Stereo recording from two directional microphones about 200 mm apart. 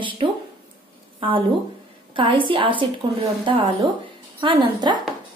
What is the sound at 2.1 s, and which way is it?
A woman's voice, 25° right (ahead or behind).